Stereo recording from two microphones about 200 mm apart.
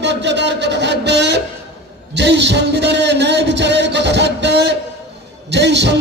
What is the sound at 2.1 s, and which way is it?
Music, 60° right (ahead or behind).